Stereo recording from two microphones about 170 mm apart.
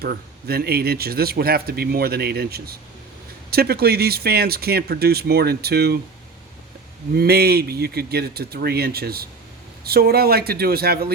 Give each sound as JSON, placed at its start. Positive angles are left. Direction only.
{"t": 0.0, "sound": "speech", "side_deg": -65}
{"t": 7.2, "sound": "speech", "side_deg": -70}